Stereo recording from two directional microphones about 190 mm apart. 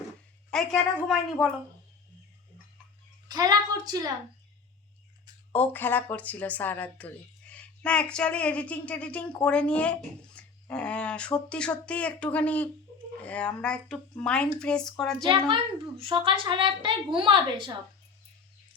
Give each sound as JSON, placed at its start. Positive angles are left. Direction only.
{"t": 0.5, "sound": "speech", "side_deg": 0}
{"t": 3.2, "sound": "a woman's voice", "side_deg": -20}
{"t": 5.5, "sound": "speech", "side_deg": 10}
{"t": 15.3, "sound": "a woman's voice", "side_deg": -25}